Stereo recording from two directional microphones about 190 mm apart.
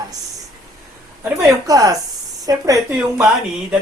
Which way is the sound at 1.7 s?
20° right (ahead or behind).